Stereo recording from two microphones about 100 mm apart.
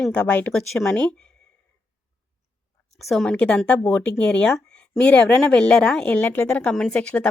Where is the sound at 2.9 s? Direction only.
Centre (ahead or behind).